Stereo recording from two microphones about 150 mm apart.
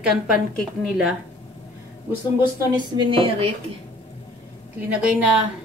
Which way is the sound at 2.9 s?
35° right (ahead or behind).